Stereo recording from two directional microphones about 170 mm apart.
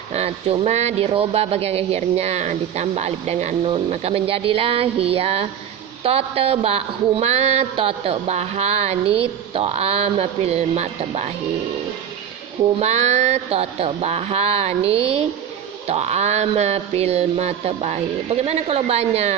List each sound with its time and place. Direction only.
0.1 s speech: 40° right (ahead or behind)
12.8 s speech: 40° right (ahead or behind)